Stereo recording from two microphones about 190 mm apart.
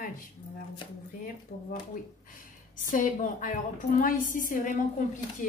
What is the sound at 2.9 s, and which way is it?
A woman's voice, 45° left (ahead or behind).